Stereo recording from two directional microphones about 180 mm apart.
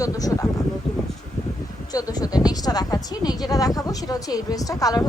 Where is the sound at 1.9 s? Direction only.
20° left (ahead or behind).